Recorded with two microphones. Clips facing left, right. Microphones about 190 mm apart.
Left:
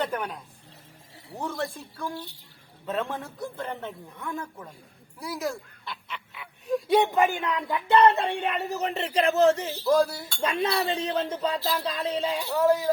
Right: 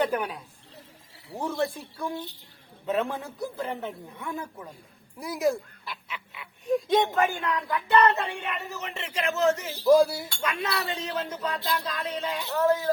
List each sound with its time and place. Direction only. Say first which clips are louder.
0.0 s a man's voice: right 3 dB; 5° right (ahead or behind)
2.0 s a man's voice: right 2 dB; 20° right (ahead or behind)
5.9 s speech: left 1 dB; centre (ahead or behind); by 9.7 s 30° left (ahead or behind)
9.7 s a man's voice: right 3 dB; 10° right (ahead or behind)
10.4 s speech: left 5 dB; 30° left (ahead or behind)
12.4 s speech: left 1 dB; 10° left (ahead or behind)